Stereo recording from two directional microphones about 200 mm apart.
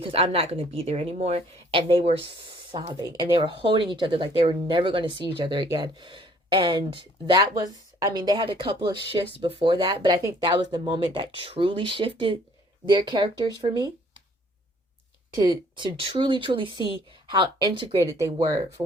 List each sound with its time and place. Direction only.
0.0 s speech: 30° right (ahead or behind)
15.4 s speech: 20° right (ahead or behind)